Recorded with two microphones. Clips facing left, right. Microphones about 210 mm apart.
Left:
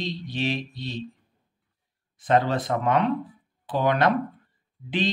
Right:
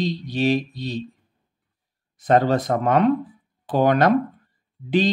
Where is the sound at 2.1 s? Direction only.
40° right (ahead or behind).